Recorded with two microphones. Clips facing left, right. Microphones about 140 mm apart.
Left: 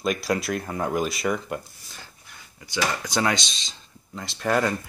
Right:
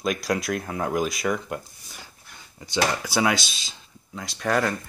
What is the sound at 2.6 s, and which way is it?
Speech, 25° right (ahead or behind).